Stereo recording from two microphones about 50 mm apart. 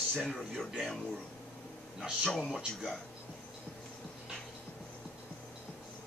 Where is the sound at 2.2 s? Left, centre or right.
Centre.